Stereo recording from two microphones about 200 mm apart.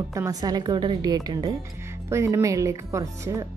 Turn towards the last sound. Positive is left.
turn(degrees=-15)  # may be behind; listen again after turning